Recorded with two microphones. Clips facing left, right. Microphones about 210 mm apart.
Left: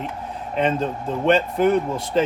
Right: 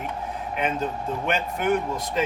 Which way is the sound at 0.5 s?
30° left (ahead or behind).